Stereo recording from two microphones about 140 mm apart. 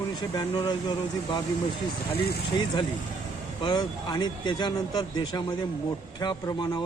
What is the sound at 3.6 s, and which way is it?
A man's voice, 30° left (ahead or behind).